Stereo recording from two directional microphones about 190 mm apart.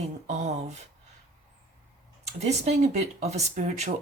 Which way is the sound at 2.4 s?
35° right (ahead or behind).